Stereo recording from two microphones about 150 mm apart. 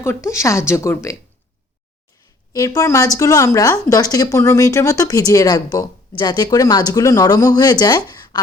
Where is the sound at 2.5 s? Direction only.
25° left (ahead or behind).